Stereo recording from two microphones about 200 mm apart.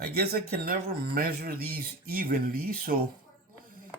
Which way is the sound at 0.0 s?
50° right (ahead or behind).